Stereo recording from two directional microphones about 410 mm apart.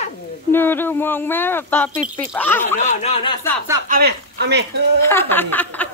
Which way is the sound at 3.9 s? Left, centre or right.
Right.